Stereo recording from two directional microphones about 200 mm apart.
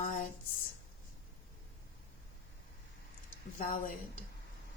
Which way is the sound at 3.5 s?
40° left (ahead or behind).